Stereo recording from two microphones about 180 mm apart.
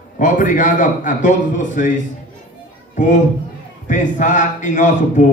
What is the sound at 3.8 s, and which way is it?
A man's voice, 45° left (ahead or behind).